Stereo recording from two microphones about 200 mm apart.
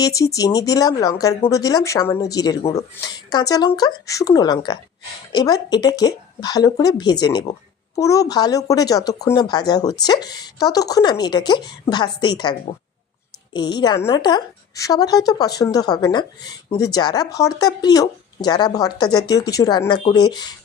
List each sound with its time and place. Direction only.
0.0 s speech: 15° left (ahead or behind)